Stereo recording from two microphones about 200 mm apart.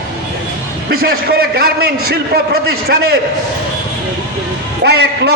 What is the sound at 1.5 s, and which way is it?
Speech, 50° right (ahead or behind).